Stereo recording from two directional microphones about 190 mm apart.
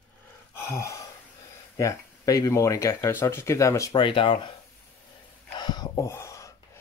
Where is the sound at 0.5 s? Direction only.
15° left (ahead or behind).